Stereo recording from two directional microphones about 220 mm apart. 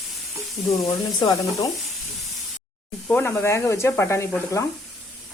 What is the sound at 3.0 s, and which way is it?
Speech, 10° left (ahead or behind).